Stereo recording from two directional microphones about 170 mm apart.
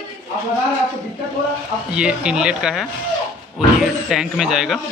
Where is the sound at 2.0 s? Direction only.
5° right (ahead or behind).